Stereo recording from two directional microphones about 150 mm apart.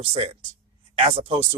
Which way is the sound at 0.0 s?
40° right (ahead or behind).